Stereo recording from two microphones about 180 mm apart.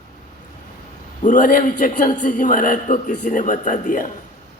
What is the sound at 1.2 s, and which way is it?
A man's voice, 50° left (ahead or behind).